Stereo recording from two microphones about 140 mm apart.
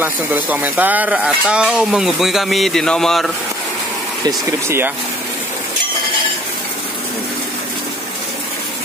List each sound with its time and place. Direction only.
0.0 s speech: 10° right (ahead or behind)
4.5 s speech: 15° right (ahead or behind)